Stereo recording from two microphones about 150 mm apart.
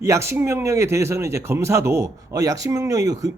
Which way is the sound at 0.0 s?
20° right (ahead or behind).